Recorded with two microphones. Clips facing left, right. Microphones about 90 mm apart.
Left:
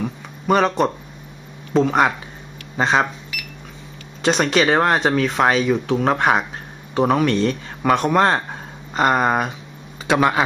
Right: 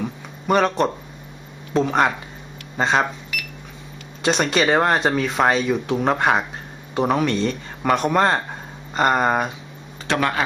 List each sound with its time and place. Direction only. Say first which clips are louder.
0.0 s a sound: left 2 dB; centre (ahead or behind)
1.7 s speech: left 2 dB; 5° left (ahead or behind)
10.0 s speech: left 4 dB; 15° left (ahead or behind)